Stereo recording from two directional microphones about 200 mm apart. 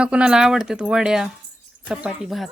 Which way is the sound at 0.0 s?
5° right (ahead or behind).